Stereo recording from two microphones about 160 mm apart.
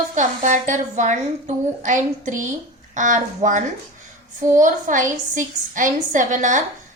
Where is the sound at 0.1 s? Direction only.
50° right (ahead or behind).